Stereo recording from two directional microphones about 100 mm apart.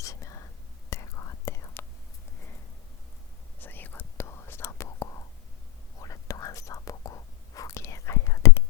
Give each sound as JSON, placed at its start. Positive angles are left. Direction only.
{"t": 0.0, "sound": "whispering", "side_deg": 30}
{"t": 3.6, "sound": "whispering", "side_deg": 20}